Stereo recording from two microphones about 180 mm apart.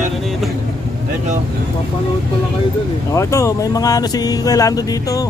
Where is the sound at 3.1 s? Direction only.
15° left (ahead or behind).